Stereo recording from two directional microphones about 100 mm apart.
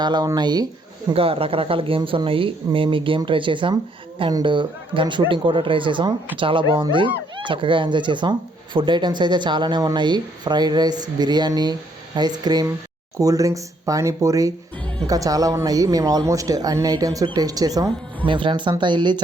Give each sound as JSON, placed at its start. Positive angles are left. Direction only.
{"t": 0.0, "sound": "speech", "side_deg": -45}
{"t": 1.1, "sound": "speech", "side_deg": -70}
{"t": 18.3, "sound": "speech", "side_deg": -55}